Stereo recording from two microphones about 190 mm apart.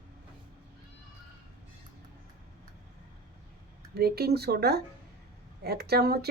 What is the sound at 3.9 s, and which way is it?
A woman's voice, 55° right (ahead or behind).